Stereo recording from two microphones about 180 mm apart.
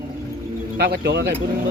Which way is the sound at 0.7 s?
60° right (ahead or behind).